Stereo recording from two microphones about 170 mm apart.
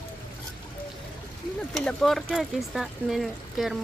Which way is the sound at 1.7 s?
5° left (ahead or behind).